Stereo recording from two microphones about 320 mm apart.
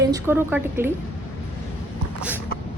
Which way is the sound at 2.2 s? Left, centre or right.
Centre.